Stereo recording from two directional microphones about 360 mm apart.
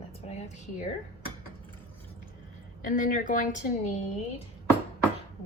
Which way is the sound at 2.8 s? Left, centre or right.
Left.